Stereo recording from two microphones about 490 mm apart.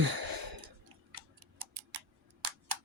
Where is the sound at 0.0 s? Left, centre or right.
Right.